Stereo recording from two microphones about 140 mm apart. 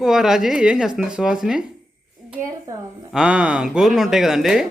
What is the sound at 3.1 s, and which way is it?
Speech, 5° right (ahead or behind).